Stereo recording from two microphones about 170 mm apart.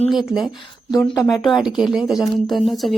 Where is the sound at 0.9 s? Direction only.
25° left (ahead or behind).